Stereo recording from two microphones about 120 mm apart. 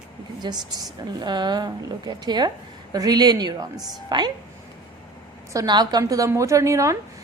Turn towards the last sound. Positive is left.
turn(degrees=-25)  # may be behind; listen again after turning